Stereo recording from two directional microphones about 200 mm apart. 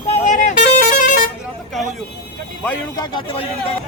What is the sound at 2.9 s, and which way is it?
Speech, 20° left (ahead or behind).